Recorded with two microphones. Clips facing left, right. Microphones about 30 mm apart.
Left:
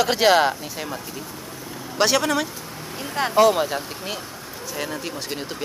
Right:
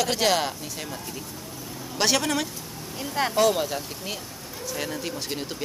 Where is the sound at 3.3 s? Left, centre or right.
Centre.